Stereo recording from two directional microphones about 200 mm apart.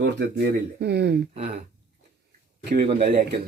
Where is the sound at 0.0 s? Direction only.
55° right (ahead or behind).